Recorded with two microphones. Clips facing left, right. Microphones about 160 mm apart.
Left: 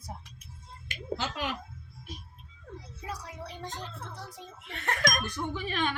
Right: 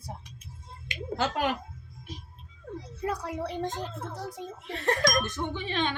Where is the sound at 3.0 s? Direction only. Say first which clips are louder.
Right 9 dB; 55° right (ahead or behind); by 5.2 s 35° right (ahead or behind).